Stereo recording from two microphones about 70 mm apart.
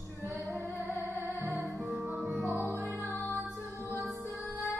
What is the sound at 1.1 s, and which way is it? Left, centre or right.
Music, left.